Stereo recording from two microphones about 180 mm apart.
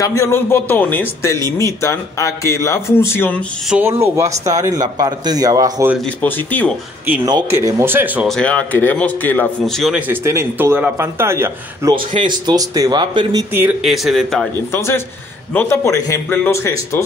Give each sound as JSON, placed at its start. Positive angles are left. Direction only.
{"t": 0.0, "sound": "a man's voice", "side_deg": 15}
{"t": 3.6, "sound": "speech", "side_deg": -10}
{"t": 6.0, "sound": "a man's voice", "side_deg": 10}
{"t": 7.2, "sound": "speech", "side_deg": -20}
{"t": 8.3, "sound": "a man's voice", "side_deg": 5}
{"t": 11.9, "sound": "speech", "side_deg": -25}
{"t": 13.8, "sound": "a man's voice", "side_deg": 0}
{"t": 14.7, "sound": "a man's voice", "side_deg": 15}